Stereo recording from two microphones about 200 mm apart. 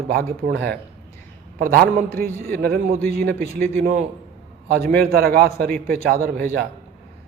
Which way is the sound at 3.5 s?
45° right (ahead or behind).